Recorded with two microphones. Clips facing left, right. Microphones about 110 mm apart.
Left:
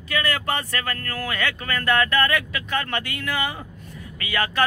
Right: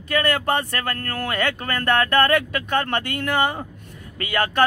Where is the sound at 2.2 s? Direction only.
50° right (ahead or behind).